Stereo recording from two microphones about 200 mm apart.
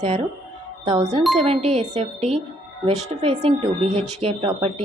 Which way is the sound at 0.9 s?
20° right (ahead or behind).